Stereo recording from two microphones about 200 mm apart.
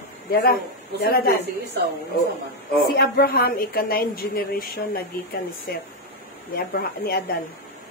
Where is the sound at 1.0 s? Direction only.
50° left (ahead or behind).